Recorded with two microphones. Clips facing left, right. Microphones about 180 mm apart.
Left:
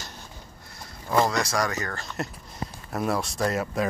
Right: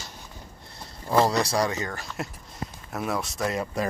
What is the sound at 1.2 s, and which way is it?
Speech, 30° right (ahead or behind).